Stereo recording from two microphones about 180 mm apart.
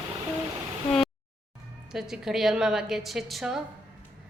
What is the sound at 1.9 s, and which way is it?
A woman's voice, 5° right (ahead or behind).